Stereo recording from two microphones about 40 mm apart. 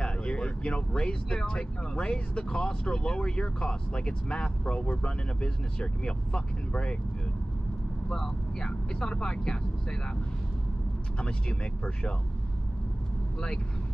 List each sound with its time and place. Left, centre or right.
0.0 s speech: left
8.1 s speech: centre
11.1 s speech: left